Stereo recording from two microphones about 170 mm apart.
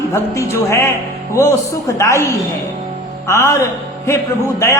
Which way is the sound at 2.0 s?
15° left (ahead or behind).